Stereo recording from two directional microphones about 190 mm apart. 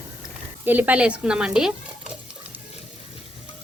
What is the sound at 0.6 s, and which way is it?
Speech, 10° right (ahead or behind).